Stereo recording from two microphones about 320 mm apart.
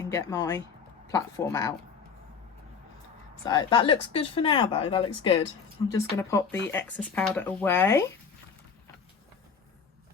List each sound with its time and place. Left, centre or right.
0.0 s speech: centre
3.4 s speech: centre